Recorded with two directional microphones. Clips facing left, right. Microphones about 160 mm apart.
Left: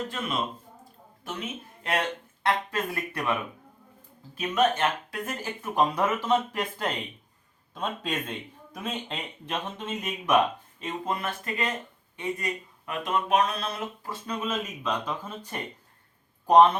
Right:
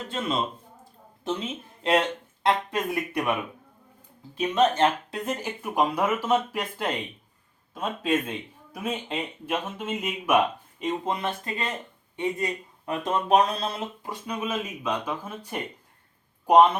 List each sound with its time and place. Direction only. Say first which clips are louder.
0.1 s speech: right 3 dB; 25° right (ahead or behind)
4.4 s speech: right 3 dB; 25° right (ahead or behind); by 10.3 s 5° right (ahead or behind)
10.8 s speech: right 4 dB; 20° right (ahead or behind)
14.0 s speech: right 1 dB; 15° right (ahead or behind)